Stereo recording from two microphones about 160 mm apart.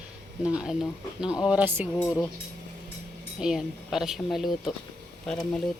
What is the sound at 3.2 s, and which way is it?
Speech, 5° right (ahead or behind).